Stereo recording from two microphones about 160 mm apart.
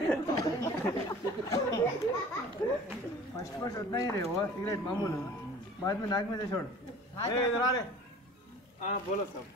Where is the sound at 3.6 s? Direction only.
25° left (ahead or behind).